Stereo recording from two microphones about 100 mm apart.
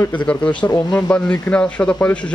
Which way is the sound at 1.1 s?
10° left (ahead or behind).